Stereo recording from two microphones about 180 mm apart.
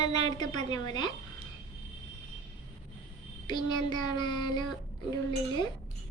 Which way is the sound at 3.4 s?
25° left (ahead or behind).